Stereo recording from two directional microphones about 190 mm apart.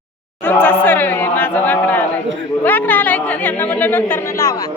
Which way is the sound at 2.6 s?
10° left (ahead or behind).